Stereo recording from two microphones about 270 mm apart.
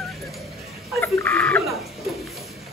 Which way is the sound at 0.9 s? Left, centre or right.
Centre.